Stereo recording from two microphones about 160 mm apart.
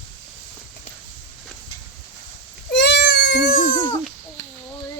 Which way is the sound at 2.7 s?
90° left.